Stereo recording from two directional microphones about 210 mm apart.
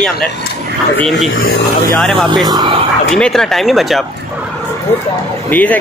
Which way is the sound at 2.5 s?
20° right (ahead or behind).